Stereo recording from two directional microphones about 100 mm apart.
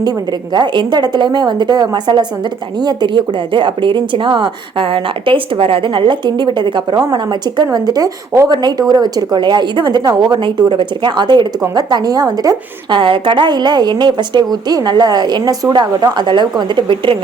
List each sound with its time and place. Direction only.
0.5 s a woman's voice: 50° right (ahead or behind)
13.0 s speech: 55° right (ahead or behind)